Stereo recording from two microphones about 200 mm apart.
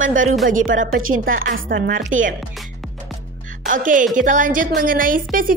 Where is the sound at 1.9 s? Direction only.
40° right (ahead or behind).